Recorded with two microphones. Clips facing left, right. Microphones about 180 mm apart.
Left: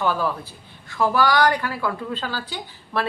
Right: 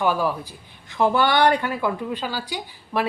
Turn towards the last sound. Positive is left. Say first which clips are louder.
# right 1 dB
turn(degrees=-10)  # may be behind; listen again after turning